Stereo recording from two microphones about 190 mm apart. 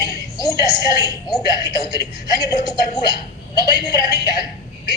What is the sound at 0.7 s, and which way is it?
A woman's voice, 20° left (ahead or behind).